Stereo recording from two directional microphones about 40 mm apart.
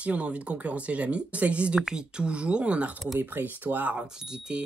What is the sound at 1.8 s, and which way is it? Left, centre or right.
Speech, centre.